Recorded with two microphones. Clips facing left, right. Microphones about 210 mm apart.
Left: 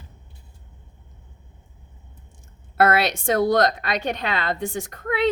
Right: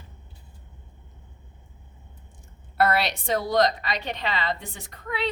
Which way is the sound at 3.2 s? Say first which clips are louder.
Left 4 dB; 50° left (ahead or behind).